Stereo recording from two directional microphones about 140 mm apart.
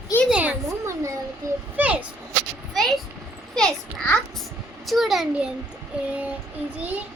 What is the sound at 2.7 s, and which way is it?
Speech, centre (ahead or behind).